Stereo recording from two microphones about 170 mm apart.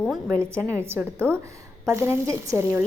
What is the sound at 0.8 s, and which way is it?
A woman's voice, 15° right (ahead or behind).